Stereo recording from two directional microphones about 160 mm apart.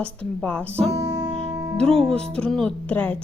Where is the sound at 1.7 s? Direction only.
5° left (ahead or behind).